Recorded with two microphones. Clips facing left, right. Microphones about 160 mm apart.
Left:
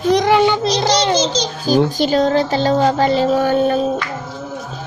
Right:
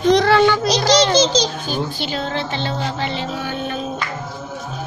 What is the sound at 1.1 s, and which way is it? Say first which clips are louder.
Babbling: right 1 dB; 90° right.